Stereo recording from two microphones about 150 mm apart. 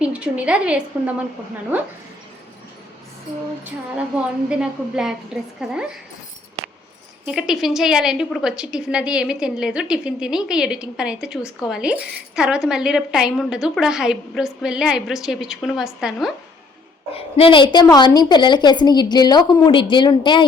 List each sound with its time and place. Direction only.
0.0 s a woman's voice: 10° right (ahead or behind)
4.4 s a woman's voice: 5° right (ahead or behind)
7.3 s a woman's voice: 5° right (ahead or behind)
17.1 s a woman's voice: 40° left (ahead or behind)